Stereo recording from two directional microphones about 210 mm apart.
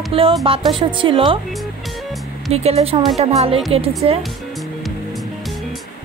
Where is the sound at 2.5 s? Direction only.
30° right (ahead or behind).